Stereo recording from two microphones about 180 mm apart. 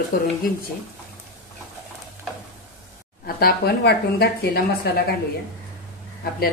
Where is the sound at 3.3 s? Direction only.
60° left (ahead or behind).